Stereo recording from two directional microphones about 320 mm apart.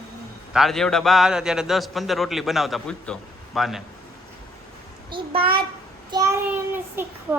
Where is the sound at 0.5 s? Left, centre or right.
Centre.